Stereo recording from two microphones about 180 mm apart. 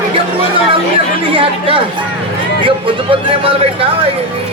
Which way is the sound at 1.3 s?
30° right (ahead or behind).